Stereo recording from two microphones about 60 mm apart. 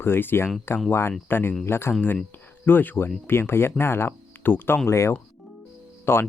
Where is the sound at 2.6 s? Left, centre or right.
Left.